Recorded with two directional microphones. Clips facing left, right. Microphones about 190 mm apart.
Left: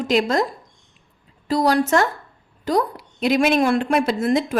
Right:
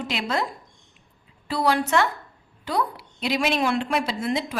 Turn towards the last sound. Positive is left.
turn(degrees=50)  # may be behind; listen again after turning